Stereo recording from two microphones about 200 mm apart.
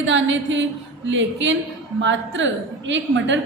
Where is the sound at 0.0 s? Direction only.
70° right (ahead or behind).